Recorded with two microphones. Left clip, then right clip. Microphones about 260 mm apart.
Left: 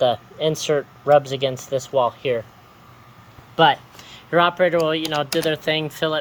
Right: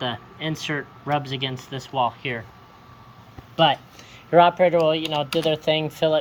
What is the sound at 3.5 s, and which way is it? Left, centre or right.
Speech, centre.